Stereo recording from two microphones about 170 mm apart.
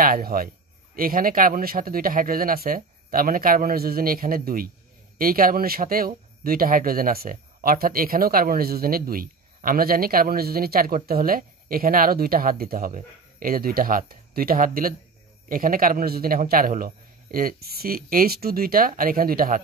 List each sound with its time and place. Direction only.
0.0 s speech: 55° right (ahead or behind)